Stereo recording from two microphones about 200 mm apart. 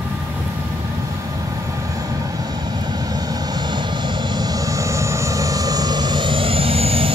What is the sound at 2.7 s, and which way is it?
Vehicle, 20° right (ahead or behind).